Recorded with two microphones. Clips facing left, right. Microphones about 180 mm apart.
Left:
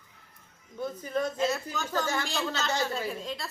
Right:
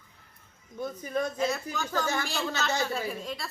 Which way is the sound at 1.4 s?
5° left (ahead or behind).